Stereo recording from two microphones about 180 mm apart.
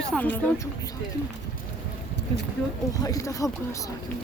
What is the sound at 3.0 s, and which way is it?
Speech, 20° left (ahead or behind).